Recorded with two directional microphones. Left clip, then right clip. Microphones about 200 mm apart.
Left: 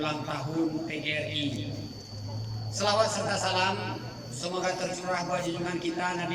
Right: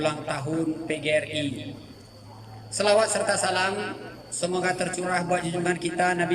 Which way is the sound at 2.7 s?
45° right (ahead or behind).